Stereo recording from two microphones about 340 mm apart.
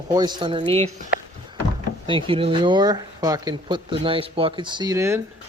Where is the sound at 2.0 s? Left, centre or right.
Centre.